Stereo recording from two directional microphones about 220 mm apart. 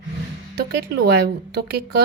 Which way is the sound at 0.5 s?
50° right (ahead or behind).